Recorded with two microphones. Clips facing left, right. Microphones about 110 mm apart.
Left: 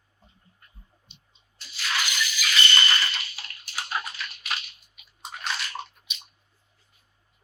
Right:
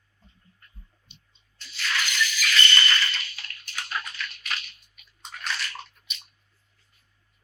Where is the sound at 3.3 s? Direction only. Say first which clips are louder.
Even; 25° left (ahead or behind).